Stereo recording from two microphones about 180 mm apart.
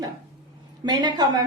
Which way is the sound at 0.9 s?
25° right (ahead or behind).